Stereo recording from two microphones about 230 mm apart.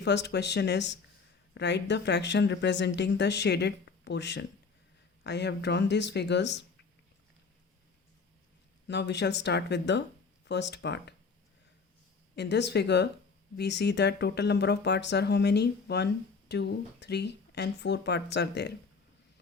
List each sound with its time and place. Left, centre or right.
0.0 s speech: left
8.9 s speech: left
12.4 s speech: left